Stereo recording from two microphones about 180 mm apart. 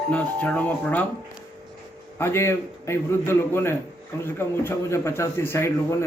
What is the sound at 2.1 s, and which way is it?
A man's voice, 15° left (ahead or behind).